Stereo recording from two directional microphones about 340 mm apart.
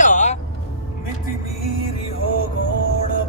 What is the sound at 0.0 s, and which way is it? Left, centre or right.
Vehicle, left.